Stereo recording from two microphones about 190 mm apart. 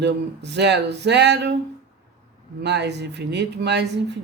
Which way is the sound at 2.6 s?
65° right (ahead or behind).